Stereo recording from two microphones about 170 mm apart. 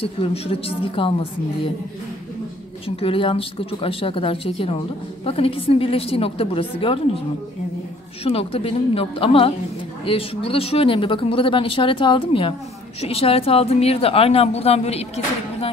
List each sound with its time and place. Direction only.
0.0 s a woman's voice: 35° left (ahead or behind)
3.0 s a woman's voice: 30° left (ahead or behind)
8.2 s a woman's voice: 35° left (ahead or behind)